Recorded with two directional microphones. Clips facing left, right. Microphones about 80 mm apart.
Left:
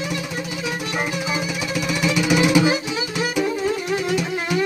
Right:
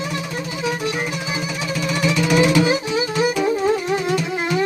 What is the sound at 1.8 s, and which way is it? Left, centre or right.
Music, centre.